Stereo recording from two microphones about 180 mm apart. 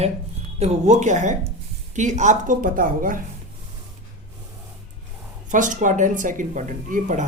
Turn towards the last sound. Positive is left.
turn(degrees=-45)  # may be behind; listen again after turning